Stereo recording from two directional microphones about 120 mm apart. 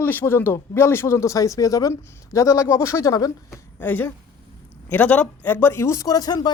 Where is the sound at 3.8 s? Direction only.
15° left (ahead or behind).